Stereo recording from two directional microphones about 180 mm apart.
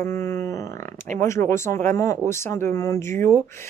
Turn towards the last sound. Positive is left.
turn(degrees=15)  # may be behind; listen again after turning